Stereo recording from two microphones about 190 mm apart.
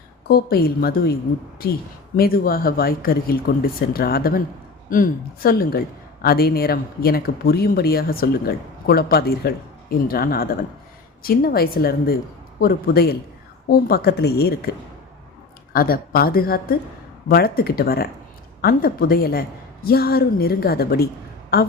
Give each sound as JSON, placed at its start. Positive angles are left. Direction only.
{"t": 0.3, "sound": "a woman's voice", "side_deg": 55}
{"t": 2.1, "sound": "a woman's voice", "side_deg": 50}